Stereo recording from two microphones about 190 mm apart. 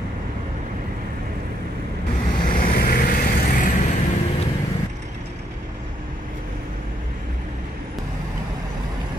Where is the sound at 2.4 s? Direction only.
45° left (ahead or behind).